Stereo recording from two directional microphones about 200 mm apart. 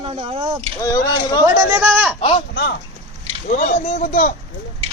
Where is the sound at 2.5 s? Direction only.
55° left (ahead or behind).